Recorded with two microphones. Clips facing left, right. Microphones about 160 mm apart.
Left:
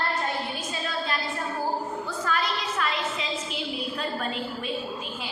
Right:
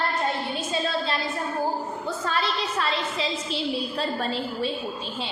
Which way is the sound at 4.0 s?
30° right (ahead or behind).